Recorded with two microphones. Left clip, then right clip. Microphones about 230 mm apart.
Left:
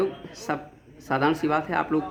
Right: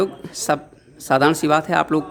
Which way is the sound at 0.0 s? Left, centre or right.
Right.